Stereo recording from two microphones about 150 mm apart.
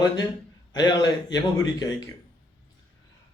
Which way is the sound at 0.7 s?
25° left (ahead or behind).